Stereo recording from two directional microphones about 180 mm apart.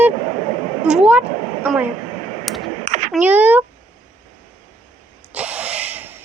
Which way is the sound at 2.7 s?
40° right (ahead or behind).